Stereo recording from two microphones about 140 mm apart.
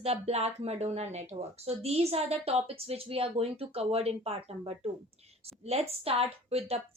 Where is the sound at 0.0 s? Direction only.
50° right (ahead or behind).